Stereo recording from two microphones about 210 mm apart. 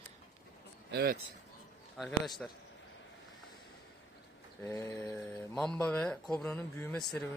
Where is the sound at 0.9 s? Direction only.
45° right (ahead or behind).